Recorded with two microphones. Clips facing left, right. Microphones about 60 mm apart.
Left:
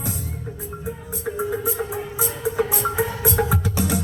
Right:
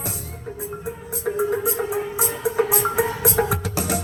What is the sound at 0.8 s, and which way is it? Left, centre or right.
Music, centre.